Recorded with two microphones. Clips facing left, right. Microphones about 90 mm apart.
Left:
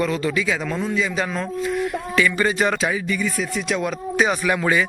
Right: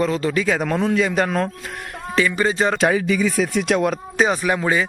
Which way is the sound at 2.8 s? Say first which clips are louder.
Right 5 dB; 75° right (ahead or behind).